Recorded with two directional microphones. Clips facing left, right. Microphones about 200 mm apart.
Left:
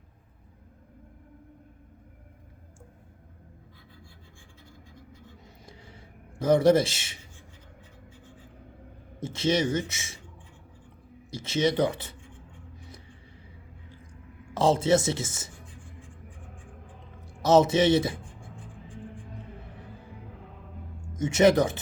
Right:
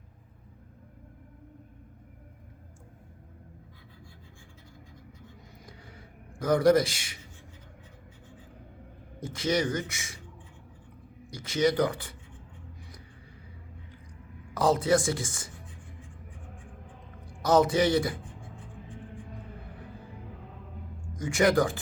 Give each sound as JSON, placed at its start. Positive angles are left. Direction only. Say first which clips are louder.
{"t": 6.4, "sound": "speech", "louder": "left 2 dB", "side_deg": 25}
{"t": 9.2, "sound": "speech", "louder": "left 2 dB", "side_deg": 25}
{"t": 11.3, "sound": "speech", "louder": "even", "side_deg": 25}
{"t": 14.5, "sound": "speech", "louder": "left 2 dB", "side_deg": 25}
{"t": 17.2, "sound": "music", "louder": "left 3 dB", "side_deg": 25}
{"t": 21.1, "sound": "speech", "louder": "left 4 dB", "side_deg": 25}